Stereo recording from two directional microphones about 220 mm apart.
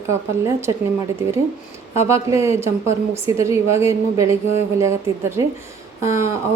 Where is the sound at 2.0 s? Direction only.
10° right (ahead or behind).